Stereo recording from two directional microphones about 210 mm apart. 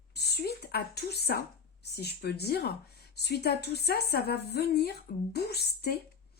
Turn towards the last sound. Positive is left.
turn(degrees=50)  # may be behind; listen again after turning